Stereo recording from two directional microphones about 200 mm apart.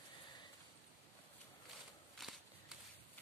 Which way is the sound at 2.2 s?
Centre (ahead or behind).